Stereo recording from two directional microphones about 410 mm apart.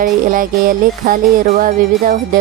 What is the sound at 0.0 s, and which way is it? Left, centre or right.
Speech, centre.